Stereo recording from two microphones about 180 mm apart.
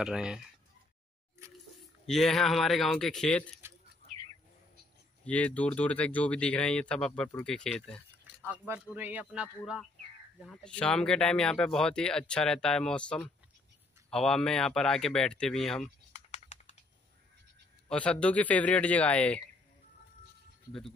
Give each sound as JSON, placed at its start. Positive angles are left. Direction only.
{"t": 0.0, "sound": "speech", "side_deg": -5}
{"t": 2.0, "sound": "speech", "side_deg": 0}
{"t": 5.2, "sound": "speech", "side_deg": 5}
{"t": 8.4, "sound": "speech", "side_deg": -10}
{"t": 16.1, "sound": "typing", "side_deg": 40}
{"t": 17.8, "sound": "speech", "side_deg": 5}